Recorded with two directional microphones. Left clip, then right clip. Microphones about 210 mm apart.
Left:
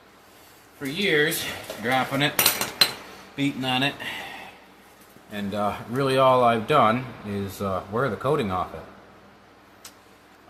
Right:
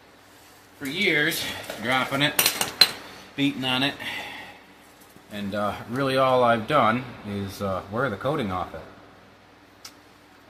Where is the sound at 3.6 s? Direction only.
10° left (ahead or behind).